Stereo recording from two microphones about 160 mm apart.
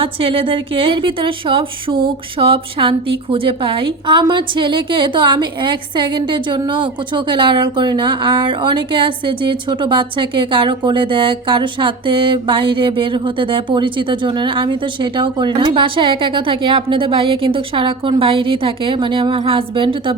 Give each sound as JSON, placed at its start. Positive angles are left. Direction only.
{"t": 0.0, "sound": "a woman's voice", "side_deg": -35}